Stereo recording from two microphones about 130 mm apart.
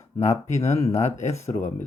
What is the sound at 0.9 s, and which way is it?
Speech, 65° left (ahead or behind).